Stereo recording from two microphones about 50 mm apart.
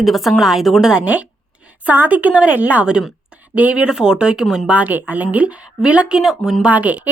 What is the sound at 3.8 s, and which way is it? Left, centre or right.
Speech, centre.